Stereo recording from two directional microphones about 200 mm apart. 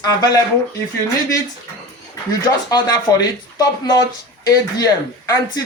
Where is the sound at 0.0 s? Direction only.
20° left (ahead or behind).